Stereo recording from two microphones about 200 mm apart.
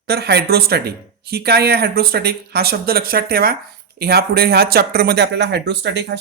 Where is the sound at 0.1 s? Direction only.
55° right (ahead or behind).